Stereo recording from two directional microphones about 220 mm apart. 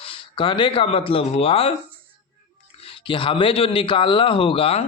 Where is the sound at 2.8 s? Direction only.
25° left (ahead or behind).